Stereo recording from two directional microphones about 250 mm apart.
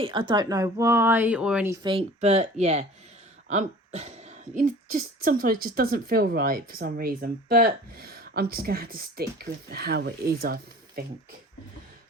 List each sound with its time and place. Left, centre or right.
0.0 s a woman's voice: centre; by 11.0 s right